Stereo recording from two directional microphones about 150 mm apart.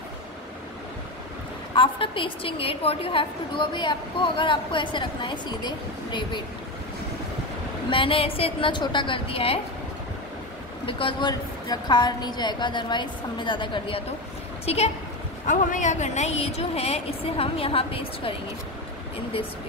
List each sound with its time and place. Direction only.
1.8 s a woman's voice: 35° left (ahead or behind)
7.9 s a woman's voice: 35° left (ahead or behind)
10.9 s a woman's voice: 35° left (ahead or behind)
15.4 s a woman's voice: 55° left (ahead or behind); by 18.3 s 40° left (ahead or behind)